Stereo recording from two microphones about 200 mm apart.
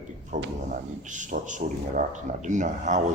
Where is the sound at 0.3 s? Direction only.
40° right (ahead or behind).